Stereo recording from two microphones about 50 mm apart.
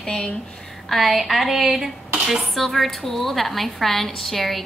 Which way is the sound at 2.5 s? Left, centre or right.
Centre.